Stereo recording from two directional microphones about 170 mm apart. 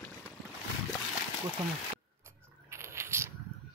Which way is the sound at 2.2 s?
15° right (ahead or behind).